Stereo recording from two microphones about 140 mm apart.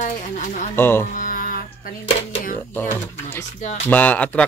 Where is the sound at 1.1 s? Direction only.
75° left (ahead or behind).